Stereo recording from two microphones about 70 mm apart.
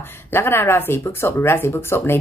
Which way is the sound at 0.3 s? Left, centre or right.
Left.